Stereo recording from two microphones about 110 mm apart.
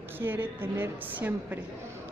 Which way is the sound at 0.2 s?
20° right (ahead or behind).